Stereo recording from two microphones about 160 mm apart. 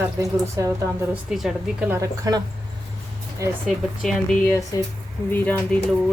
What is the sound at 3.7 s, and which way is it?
Speech, 5° left (ahead or behind).